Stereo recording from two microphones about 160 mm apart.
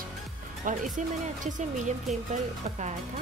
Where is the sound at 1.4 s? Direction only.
50° right (ahead or behind).